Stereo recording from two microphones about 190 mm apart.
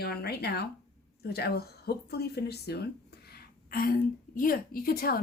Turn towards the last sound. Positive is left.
turn(degrees=50)  # may be behind; listen again after turning